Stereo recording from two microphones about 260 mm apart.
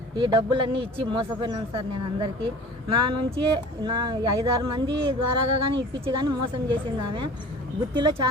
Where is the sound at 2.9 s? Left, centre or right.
Centre.